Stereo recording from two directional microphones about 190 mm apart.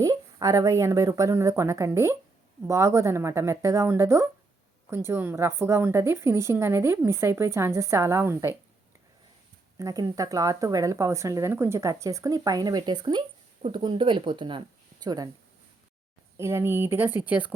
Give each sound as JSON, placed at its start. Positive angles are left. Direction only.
{"t": 0.0, "sound": "a woman's voice", "side_deg": -20}
{"t": 9.7, "sound": "speech", "side_deg": -20}
{"t": 16.4, "sound": "a woman's voice", "side_deg": -15}